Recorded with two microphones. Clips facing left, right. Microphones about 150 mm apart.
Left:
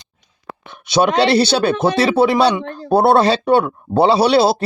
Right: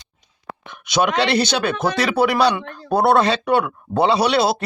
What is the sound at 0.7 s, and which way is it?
Speech, 30° left (ahead or behind).